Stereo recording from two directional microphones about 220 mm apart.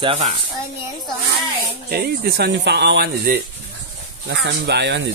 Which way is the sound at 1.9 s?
45° right (ahead or behind).